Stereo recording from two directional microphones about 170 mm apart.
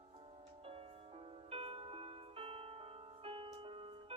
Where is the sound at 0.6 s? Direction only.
35° right (ahead or behind).